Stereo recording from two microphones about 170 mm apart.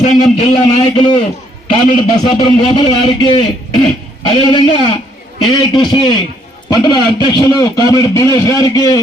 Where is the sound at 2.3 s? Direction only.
25° left (ahead or behind).